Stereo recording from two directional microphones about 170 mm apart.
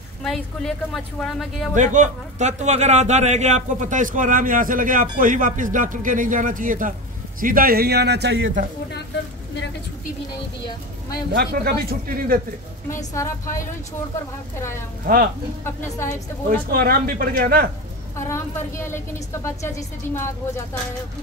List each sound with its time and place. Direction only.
0.2 s speech: centre (ahead or behind)
1.8 s a man's voice: 45° right (ahead or behind); by 8.5 s 80° right
11.3 s speech: 65° right (ahead or behind)
12.9 s a woman's voice: 15° left (ahead or behind)
16.7 s speech: 60° right (ahead or behind)
18.1 s a woman's voice: 15° left (ahead or behind)